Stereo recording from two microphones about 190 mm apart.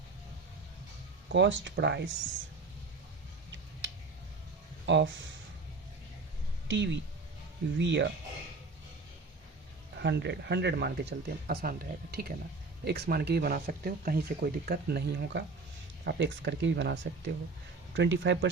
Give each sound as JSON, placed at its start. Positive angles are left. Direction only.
{"t": 1.3, "sound": "speech", "side_deg": -70}
{"t": 4.9, "sound": "speech", "side_deg": -70}
{"t": 6.7, "sound": "speech", "side_deg": -70}
{"t": 10.0, "sound": "speech", "side_deg": -65}